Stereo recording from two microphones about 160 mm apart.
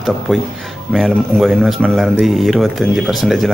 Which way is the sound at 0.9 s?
Centre (ahead or behind).